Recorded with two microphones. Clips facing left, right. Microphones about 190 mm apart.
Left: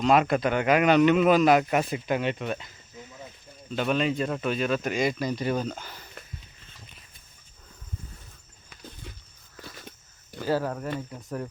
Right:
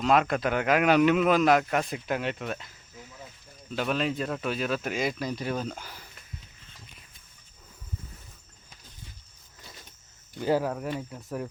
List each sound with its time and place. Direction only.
0.0 s speech: centre (ahead or behind)
10.6 s speech: 5° right (ahead or behind)